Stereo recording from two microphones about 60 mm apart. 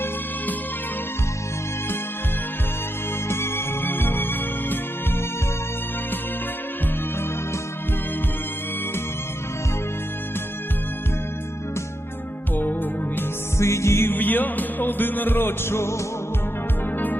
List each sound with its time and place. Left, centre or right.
3.2 s music: left
13.6 s music: left
14.1 s music: left